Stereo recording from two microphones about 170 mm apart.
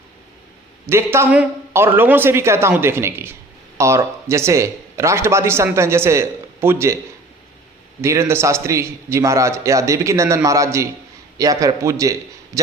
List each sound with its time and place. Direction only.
0.9 s speech: 15° right (ahead or behind)
8.0 s a man's voice: 15° right (ahead or behind)
12.5 s a sound: 20° right (ahead or behind)